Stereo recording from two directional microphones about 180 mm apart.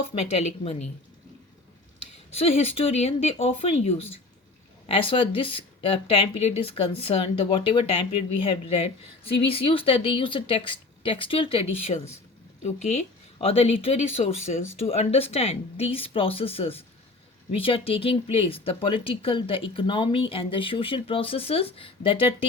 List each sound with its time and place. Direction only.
0.1 s speech: 35° left (ahead or behind)
2.5 s speech: 35° left (ahead or behind)